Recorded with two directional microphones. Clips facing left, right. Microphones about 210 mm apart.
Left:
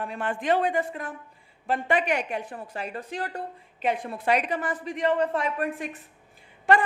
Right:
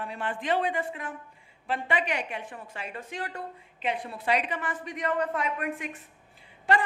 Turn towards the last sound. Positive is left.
turn(degrees=50)  # may be behind; listen again after turning